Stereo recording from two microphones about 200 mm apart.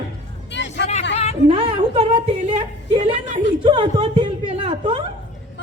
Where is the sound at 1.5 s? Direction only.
25° right (ahead or behind).